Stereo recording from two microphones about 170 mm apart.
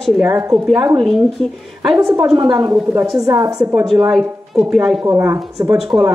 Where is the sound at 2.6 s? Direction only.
20° right (ahead or behind).